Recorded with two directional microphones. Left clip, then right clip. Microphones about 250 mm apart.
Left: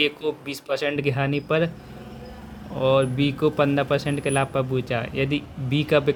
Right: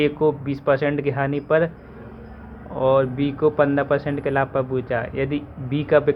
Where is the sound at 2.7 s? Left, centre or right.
Centre.